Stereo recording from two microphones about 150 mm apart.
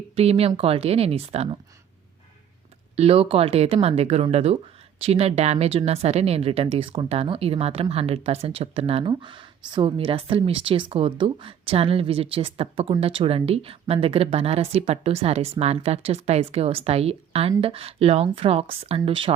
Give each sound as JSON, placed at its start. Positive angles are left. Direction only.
{"t": 0.2, "sound": "speech", "side_deg": -40}
{"t": 2.9, "sound": "speech", "side_deg": -45}